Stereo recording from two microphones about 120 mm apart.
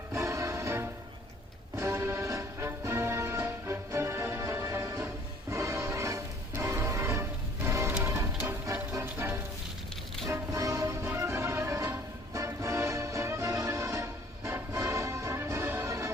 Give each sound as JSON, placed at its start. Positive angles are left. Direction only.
{"t": 0.1, "sound": "music", "side_deg": -25}